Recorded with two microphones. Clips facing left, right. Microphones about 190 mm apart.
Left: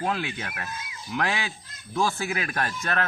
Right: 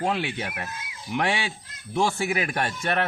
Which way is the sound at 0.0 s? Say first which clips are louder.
Right 2 dB; 25° right (ahead or behind).